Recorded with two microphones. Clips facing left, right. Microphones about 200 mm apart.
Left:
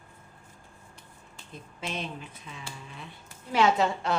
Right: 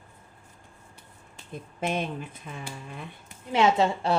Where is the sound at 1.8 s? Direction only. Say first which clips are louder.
Right 7 dB; 55° right (ahead or behind).